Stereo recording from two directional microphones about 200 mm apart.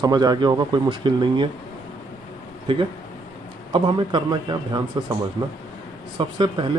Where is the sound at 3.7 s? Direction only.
25° right (ahead or behind).